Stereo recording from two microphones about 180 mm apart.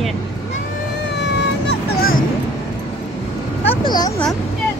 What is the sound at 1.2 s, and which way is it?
Vehicle, 65° left (ahead or behind).